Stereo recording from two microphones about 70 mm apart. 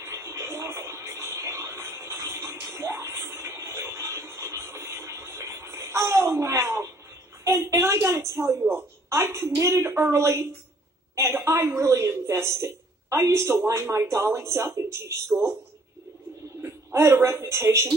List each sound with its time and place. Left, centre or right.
0.0 s a sound: right
8.7 s a woman's voice: right
9.8 s a woman's voice: right
16.9 s speech: right